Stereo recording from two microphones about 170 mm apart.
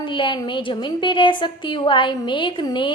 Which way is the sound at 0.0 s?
30° left (ahead or behind).